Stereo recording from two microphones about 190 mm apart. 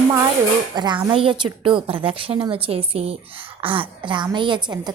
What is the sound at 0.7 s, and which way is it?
A woman's voice, 20° right (ahead or behind).